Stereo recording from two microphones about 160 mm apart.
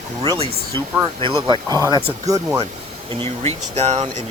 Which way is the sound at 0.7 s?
30° right (ahead or behind).